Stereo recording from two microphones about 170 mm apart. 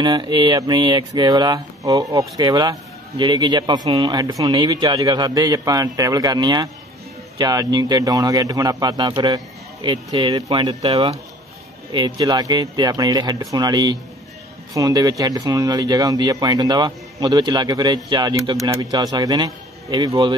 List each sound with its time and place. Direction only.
0.0 s speech: 25° right (ahead or behind)
11.9 s speech: 25° right (ahead or behind)